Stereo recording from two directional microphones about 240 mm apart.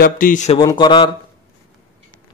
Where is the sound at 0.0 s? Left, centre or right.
Left.